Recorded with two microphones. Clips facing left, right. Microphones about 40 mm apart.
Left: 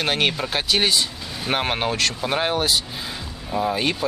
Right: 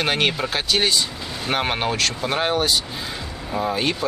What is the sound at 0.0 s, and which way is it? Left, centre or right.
Speech, centre.